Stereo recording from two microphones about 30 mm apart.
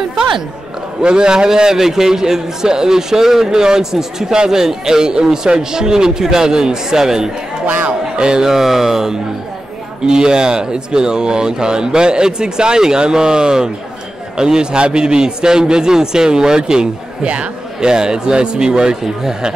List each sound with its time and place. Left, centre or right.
1.0 s a man's voice: right
8.5 s a man's voice: centre